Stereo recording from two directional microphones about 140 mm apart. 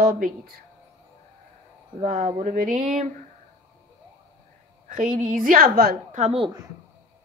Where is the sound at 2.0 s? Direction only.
55° right (ahead or behind).